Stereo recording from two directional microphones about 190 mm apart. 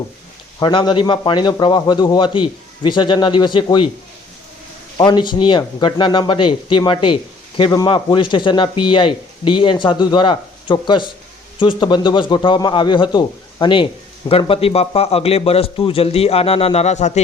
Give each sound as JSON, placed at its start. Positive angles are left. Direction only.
{"t": 0.6, "sound": "speech", "side_deg": 25}
{"t": 4.9, "sound": "speech", "side_deg": 25}